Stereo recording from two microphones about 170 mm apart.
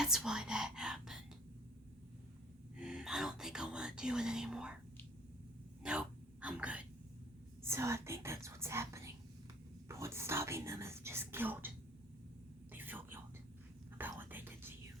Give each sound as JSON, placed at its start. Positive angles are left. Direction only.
{"t": 0.0, "sound": "whispering", "side_deg": -5}
{"t": 2.7, "sound": "speech", "side_deg": -5}
{"t": 5.8, "sound": "a sound", "side_deg": -5}
{"t": 7.6, "sound": "speech", "side_deg": -15}
{"t": 9.9, "sound": "whispering", "side_deg": -15}
{"t": 12.7, "sound": "whispering", "side_deg": -10}